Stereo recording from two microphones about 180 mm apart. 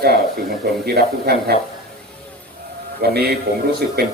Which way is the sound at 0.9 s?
60° right (ahead or behind).